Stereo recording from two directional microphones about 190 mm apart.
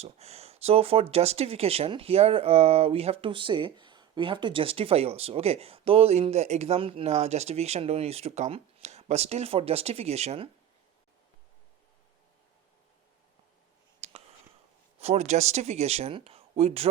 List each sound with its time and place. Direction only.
0.0 s speech: 35° right (ahead or behind)
14.0 s a sound: 35° right (ahead or behind)
14.9 s speech: 35° right (ahead or behind)